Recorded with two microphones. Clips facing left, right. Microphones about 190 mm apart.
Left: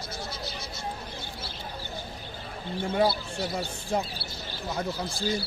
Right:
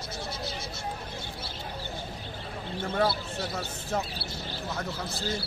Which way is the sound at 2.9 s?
10° left (ahead or behind).